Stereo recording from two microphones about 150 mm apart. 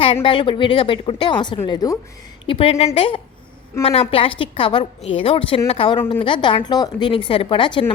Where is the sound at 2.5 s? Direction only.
35° left (ahead or behind).